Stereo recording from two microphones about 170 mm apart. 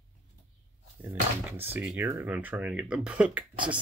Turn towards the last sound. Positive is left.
turn(degrees=-10)  # may be behind; listen again after turning